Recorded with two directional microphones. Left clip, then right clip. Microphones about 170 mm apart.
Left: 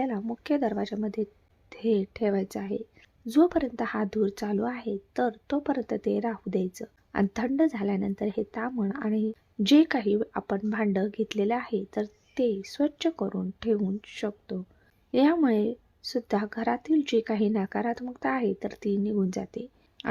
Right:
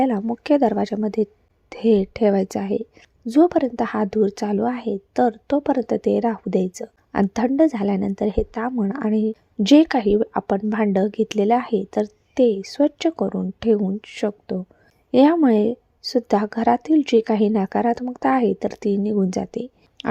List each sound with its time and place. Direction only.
0.0 s a woman's voice: 30° right (ahead or behind)